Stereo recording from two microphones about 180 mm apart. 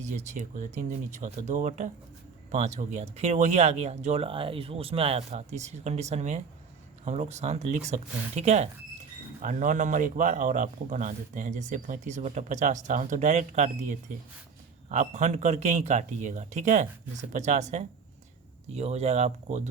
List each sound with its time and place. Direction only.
0.0 s a man's voice: 40° right (ahead or behind)